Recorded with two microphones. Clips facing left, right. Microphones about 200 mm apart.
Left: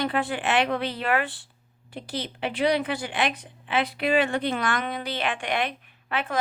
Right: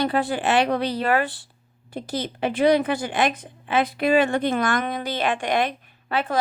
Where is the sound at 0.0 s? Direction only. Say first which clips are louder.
Right 4 dB; 35° right (ahead or behind).